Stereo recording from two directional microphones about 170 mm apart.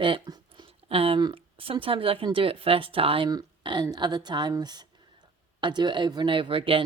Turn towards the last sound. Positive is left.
turn(degrees=-30)  # may be behind; listen again after turning